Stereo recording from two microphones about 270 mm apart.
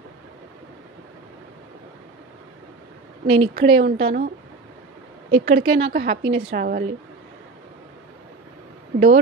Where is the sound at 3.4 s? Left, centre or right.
Right.